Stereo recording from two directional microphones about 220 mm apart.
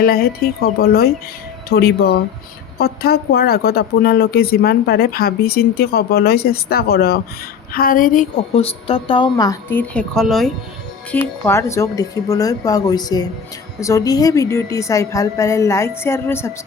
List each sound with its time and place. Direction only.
0.0 s a woman's voice: 45° left (ahead or behind); by 16.5 s 10° left (ahead or behind)